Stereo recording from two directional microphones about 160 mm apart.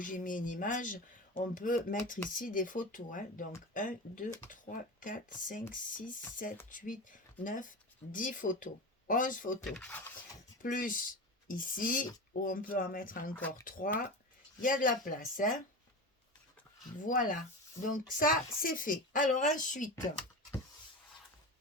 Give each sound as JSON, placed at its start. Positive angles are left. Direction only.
{"t": 0.0, "sound": "speech", "side_deg": 55}
{"t": 9.6, "sound": "speech", "side_deg": 10}
{"t": 10.6, "sound": "speech", "side_deg": 60}
{"t": 17.0, "sound": "speech", "side_deg": 55}